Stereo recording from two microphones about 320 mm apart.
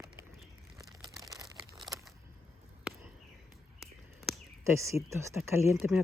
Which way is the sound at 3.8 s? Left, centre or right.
Centre.